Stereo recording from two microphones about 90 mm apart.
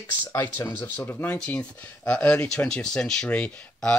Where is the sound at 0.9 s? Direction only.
20° left (ahead or behind).